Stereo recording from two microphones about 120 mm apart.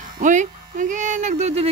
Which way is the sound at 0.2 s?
90° right.